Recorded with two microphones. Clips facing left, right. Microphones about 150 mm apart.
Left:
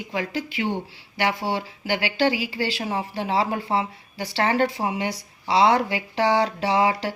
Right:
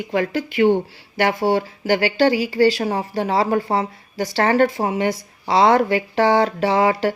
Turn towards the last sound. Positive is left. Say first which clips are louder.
# right 4 dB
turn(degrees=-50)  # may be behind; listen again after turning